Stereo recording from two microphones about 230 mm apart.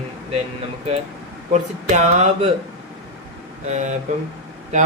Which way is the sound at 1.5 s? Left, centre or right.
Right.